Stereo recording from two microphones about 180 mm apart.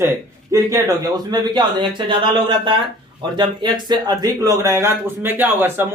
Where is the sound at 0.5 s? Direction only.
15° right (ahead or behind).